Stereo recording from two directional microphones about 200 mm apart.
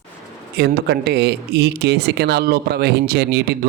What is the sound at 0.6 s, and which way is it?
Speech, 55° right (ahead or behind).